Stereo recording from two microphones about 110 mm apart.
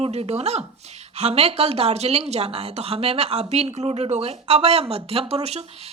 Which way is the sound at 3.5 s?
85° right.